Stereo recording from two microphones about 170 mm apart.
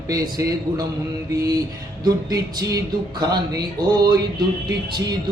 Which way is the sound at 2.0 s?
20° right (ahead or behind).